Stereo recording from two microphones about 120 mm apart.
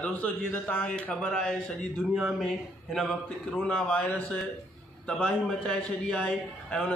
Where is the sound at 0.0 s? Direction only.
15° left (ahead or behind).